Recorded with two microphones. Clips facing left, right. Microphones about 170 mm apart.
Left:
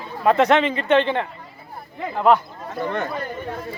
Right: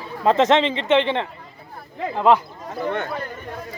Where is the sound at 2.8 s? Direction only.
Centre (ahead or behind).